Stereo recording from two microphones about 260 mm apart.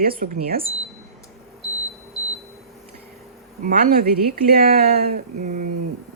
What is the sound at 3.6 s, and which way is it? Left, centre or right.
Speech, right.